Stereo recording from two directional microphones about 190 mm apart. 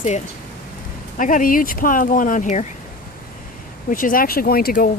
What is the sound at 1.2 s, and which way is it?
Speech, 45° left (ahead or behind).